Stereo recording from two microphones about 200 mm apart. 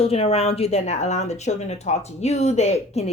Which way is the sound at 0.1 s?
30° left (ahead or behind).